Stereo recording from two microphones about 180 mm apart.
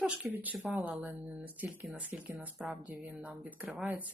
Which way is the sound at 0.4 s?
5° right (ahead or behind).